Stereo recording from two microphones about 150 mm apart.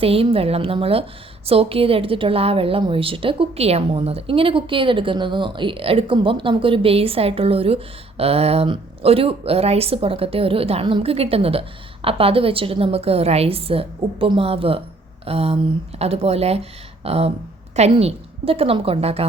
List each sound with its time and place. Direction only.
0.0 s a woman's voice: 40° right (ahead or behind)